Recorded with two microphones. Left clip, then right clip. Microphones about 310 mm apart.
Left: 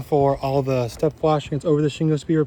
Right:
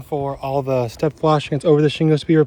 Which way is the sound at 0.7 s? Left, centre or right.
Right.